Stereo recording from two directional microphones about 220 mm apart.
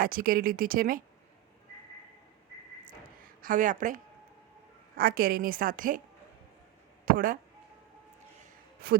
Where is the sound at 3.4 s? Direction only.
35° right (ahead or behind).